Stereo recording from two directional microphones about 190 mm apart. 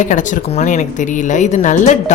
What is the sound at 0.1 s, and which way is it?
A woman's voice, 40° left (ahead or behind).